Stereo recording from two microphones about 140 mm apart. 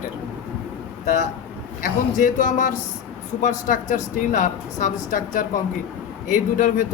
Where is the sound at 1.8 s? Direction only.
65° left (ahead or behind).